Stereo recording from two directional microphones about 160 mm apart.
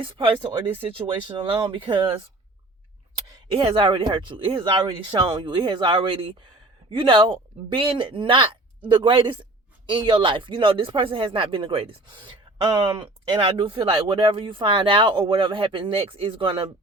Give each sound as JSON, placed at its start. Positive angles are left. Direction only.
{"t": 0.0, "sound": "speech", "side_deg": -35}